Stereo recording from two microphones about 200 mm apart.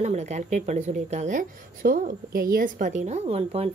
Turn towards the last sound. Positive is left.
turn(degrees=-30)  # may be behind; listen again after turning